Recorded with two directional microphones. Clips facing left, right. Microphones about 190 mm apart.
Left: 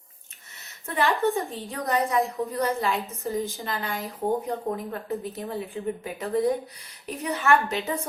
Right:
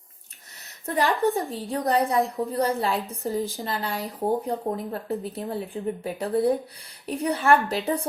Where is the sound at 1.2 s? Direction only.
Centre (ahead or behind).